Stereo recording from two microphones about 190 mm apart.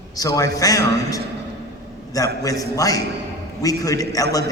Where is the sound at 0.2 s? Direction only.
20° left (ahead or behind).